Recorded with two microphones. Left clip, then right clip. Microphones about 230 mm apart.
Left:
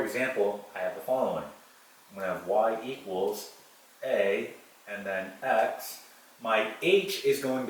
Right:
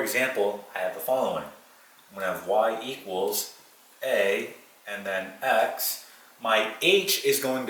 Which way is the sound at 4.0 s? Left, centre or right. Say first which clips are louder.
Right 3 dB; centre.